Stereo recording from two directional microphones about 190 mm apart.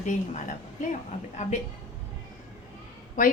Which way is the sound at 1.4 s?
40° left (ahead or behind).